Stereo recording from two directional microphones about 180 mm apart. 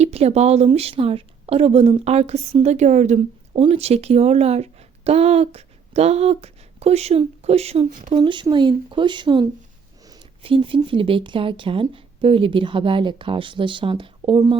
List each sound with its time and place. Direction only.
0.0 s speech: 35° right (ahead or behind)